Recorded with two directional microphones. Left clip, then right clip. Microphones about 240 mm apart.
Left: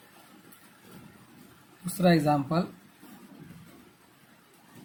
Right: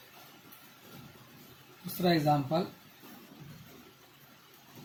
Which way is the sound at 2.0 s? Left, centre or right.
Left.